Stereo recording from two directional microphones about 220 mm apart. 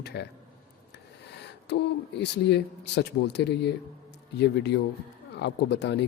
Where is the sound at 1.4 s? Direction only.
50° left (ahead or behind).